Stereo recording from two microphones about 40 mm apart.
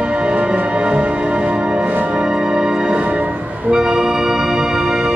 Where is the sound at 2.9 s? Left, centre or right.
Right.